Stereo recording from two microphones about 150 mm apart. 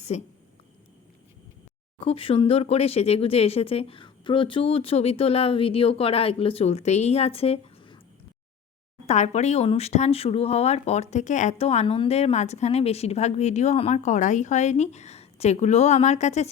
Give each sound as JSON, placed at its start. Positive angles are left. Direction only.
{"t": 0.1, "sound": "speech", "side_deg": 50}
{"t": 2.0, "sound": "speech", "side_deg": 40}
{"t": 9.0, "sound": "speech", "side_deg": 50}